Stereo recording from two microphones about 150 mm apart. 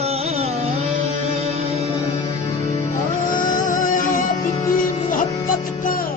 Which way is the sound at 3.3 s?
60° left (ahead or behind).